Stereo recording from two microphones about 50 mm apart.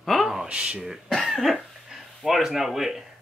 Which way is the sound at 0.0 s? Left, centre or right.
Centre.